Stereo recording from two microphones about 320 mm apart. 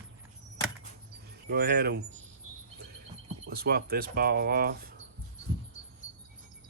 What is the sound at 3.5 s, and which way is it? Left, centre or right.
Speech, right.